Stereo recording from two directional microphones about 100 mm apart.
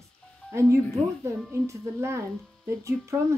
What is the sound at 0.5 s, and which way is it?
Speech, 30° right (ahead or behind).